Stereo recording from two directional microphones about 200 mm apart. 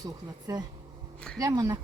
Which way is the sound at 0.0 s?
15° right (ahead or behind).